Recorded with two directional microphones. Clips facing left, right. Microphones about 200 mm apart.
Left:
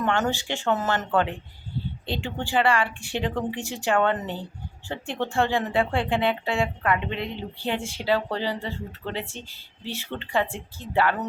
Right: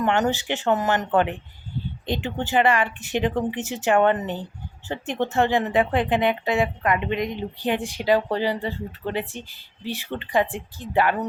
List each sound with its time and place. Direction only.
0.0 s speech: 15° right (ahead or behind)